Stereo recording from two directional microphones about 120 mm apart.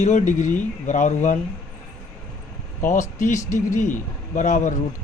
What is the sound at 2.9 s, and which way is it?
Speech, 90° left.